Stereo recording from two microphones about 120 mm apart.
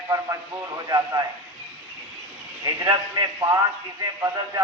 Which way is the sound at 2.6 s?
30° right (ahead or behind).